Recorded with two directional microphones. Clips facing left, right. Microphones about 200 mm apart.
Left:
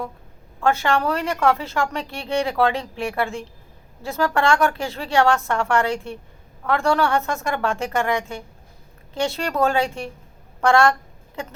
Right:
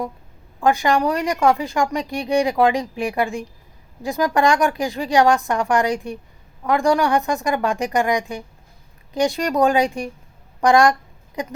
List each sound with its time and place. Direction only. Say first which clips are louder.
0.6 s speech: right 2 dB; 15° right (ahead or behind)